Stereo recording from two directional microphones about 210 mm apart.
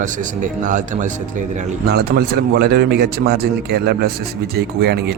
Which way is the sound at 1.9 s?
50° right (ahead or behind).